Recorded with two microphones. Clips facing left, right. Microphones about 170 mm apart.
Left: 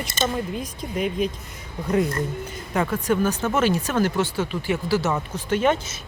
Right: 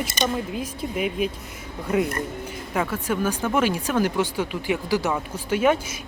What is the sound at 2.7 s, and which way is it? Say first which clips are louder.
Speech: left 3 dB; 5° right (ahead or behind).